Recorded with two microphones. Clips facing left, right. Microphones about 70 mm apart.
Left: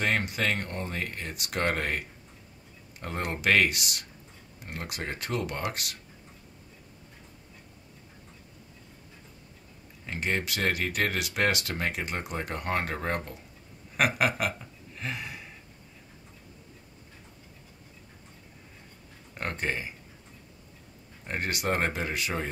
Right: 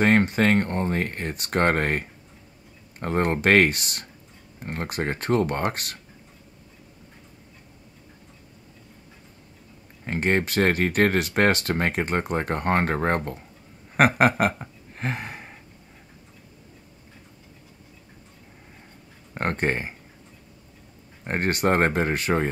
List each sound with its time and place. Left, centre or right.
0.0 s speech: right
10.0 s speech: right
13.9 s a sound: right
19.3 s speech: right
21.2 s speech: right